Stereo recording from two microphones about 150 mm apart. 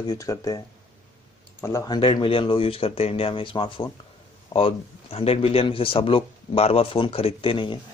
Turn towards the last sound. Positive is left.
turn(degrees=35)  # may be behind; listen again after turning